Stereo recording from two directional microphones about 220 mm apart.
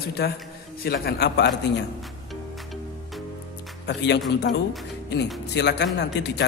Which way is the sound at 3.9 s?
50° left (ahead or behind).